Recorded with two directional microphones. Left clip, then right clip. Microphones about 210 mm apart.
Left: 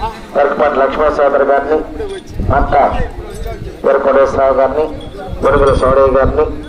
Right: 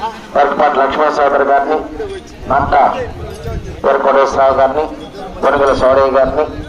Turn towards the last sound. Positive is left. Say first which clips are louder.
# left 1 dB
turn(degrees=-35)  # may be behind; listen again after turning